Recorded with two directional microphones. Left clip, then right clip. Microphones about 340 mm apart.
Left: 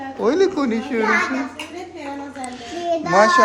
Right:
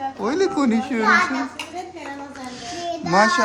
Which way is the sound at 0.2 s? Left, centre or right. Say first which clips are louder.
Left 4 dB; centre.